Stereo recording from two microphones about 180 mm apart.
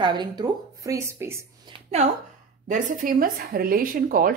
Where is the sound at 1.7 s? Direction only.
25° right (ahead or behind).